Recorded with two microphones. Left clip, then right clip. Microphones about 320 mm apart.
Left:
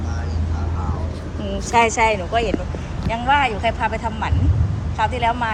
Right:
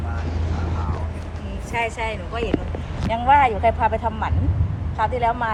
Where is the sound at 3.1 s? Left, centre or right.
Centre.